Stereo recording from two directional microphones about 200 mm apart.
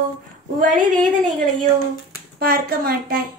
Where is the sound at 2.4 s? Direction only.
50° right (ahead or behind).